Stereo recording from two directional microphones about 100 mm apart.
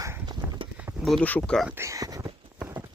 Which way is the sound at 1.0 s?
Centre (ahead or behind).